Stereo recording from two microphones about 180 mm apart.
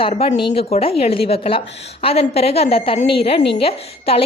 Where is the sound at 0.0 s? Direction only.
35° left (ahead or behind).